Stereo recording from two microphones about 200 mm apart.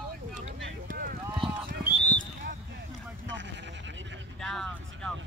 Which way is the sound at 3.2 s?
65° right (ahead or behind).